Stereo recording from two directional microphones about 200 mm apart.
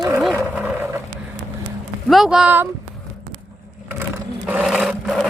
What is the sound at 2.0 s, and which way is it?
Speech, centre (ahead or behind).